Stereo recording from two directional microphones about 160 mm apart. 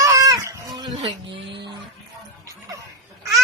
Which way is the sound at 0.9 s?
35° right (ahead or behind).